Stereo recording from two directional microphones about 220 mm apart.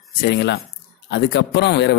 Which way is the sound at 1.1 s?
50° left (ahead or behind).